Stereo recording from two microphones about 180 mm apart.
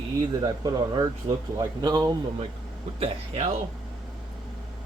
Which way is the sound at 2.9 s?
35° right (ahead or behind).